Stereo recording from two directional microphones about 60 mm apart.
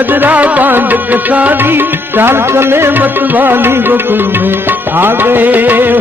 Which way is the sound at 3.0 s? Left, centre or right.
Right.